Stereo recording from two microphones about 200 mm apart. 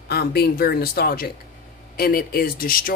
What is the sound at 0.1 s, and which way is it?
Speech, 55° left (ahead or behind).